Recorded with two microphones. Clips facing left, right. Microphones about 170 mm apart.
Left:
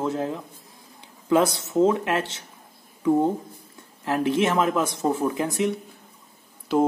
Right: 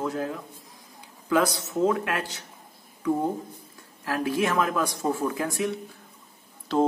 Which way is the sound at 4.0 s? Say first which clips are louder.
Left 4 dB; 25° left (ahead or behind).